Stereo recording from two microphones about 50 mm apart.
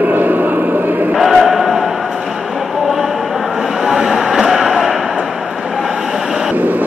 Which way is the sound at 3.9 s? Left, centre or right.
Centre.